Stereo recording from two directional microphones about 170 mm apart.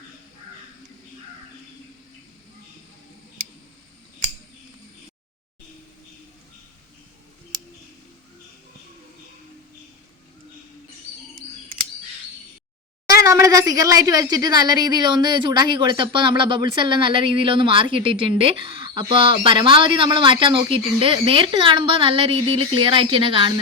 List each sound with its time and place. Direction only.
13.2 s a woman's voice: 20° right (ahead or behind)